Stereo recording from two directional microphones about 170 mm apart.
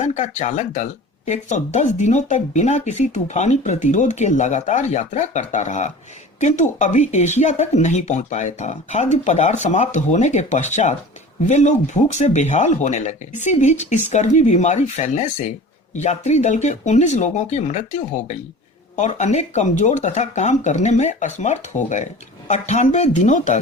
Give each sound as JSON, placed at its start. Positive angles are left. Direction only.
{"t": 0.0, "sound": "speech", "side_deg": 40}
{"t": 18.9, "sound": "speech", "side_deg": 45}